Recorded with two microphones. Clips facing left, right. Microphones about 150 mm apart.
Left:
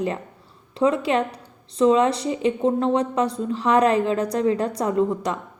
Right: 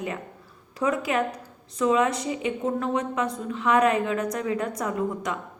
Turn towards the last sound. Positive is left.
turn(degrees=30)  # may be behind; listen again after turning